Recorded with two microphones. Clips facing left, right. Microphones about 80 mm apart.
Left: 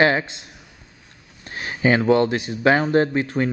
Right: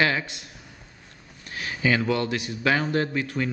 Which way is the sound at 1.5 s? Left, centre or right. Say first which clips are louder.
Left 5 dB; left.